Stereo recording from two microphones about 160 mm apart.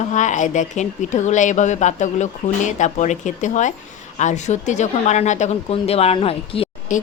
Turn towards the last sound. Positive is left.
turn(degrees=55)  # may be behind; listen again after turning